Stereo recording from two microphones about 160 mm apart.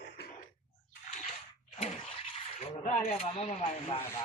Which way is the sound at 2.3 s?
40° left (ahead or behind).